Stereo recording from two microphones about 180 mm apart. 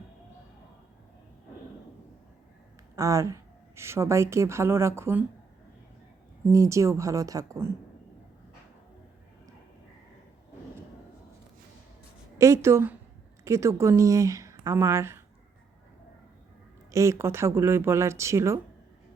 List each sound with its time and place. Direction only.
2.9 s a woman's voice: 15° right (ahead or behind)
6.5 s speech: 15° right (ahead or behind)
12.4 s speech: 15° right (ahead or behind)
16.9 s speech: 15° right (ahead or behind)